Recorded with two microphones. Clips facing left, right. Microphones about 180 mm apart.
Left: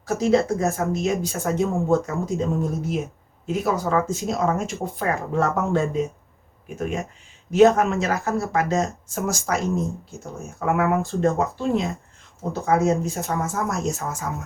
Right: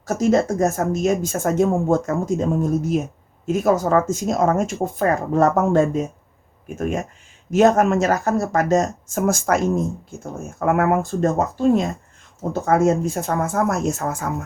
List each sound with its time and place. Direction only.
0.0 s speech: 45° right (ahead or behind)
7.5 s speech: 45° right (ahead or behind)